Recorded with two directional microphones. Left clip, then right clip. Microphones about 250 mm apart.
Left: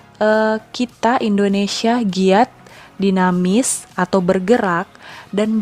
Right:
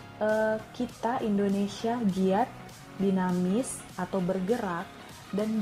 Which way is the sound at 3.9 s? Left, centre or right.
Left.